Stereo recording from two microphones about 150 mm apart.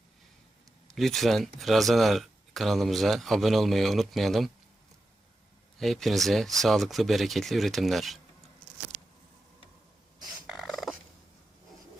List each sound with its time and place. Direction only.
0.9 s speech: centre (ahead or behind)
5.8 s speech: centre (ahead or behind)
8.9 s a sound: 90° right
10.4 s fowl: centre (ahead or behind)